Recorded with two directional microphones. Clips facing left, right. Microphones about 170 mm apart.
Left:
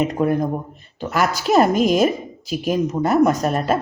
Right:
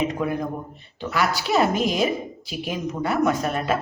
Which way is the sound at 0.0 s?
45° left (ahead or behind).